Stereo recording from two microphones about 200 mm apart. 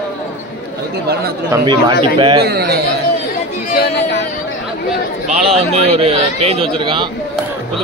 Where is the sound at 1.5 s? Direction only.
20° right (ahead or behind).